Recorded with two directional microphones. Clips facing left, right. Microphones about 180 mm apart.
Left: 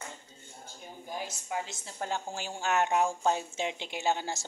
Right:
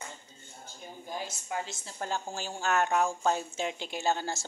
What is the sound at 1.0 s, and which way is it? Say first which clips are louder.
A woman's voice: even; 10° left (ahead or behind).